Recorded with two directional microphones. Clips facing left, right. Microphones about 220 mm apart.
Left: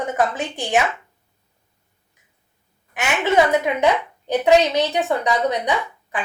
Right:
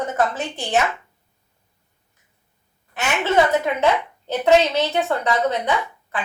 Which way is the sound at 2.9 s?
15° left (ahead or behind).